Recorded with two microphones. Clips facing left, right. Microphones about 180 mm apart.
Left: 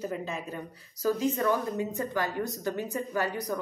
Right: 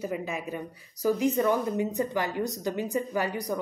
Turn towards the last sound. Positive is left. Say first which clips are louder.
# right 1 dB
turn(degrees=-15)  # may be behind; listen again after turning